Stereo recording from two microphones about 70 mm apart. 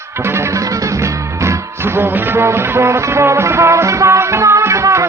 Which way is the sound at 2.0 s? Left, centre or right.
Right.